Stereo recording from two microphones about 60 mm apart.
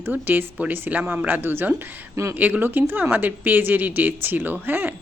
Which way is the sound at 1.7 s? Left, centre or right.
Right.